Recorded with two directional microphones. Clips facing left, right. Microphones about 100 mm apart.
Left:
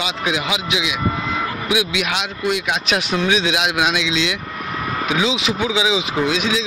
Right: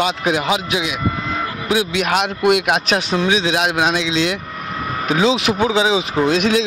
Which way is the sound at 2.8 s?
30° right (ahead or behind).